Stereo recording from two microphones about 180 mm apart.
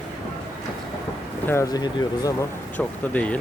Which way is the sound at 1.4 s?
20° left (ahead or behind).